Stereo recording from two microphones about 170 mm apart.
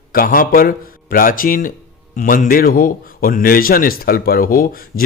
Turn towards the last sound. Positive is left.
turn(degrees=60)  # may be behind; listen again after turning